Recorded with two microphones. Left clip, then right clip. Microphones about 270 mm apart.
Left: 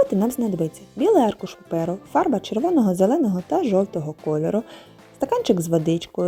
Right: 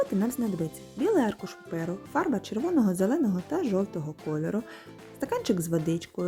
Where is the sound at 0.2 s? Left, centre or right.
Centre.